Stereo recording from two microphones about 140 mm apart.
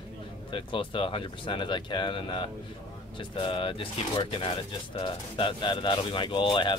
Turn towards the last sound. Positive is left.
turn(degrees=35)  # may be behind; listen again after turning